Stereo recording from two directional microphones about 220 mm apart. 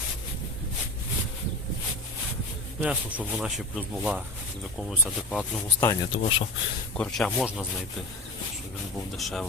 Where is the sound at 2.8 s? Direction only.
5° right (ahead or behind).